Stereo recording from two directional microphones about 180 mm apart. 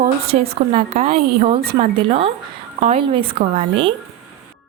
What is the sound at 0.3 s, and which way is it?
A woman's voice, 35° right (ahead or behind).